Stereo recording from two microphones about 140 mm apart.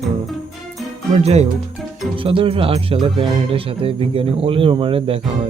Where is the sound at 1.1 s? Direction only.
50° right (ahead or behind).